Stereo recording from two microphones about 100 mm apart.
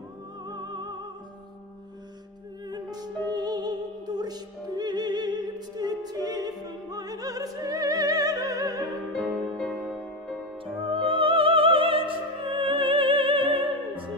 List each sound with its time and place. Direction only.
0.5 s music: 45° right (ahead or behind)
2.7 s music: 40° right (ahead or behind)
9.2 s music: centre (ahead or behind)
10.6 s music: 60° right (ahead or behind)